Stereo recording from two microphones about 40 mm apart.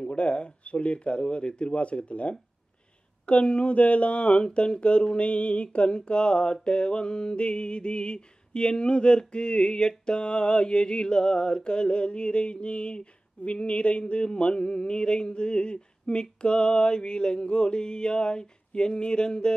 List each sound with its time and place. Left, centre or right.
0.0 s speech: left
3.3 s mantra: left